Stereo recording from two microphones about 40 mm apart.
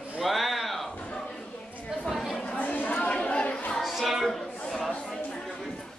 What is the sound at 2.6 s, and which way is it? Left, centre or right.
Chatter, left.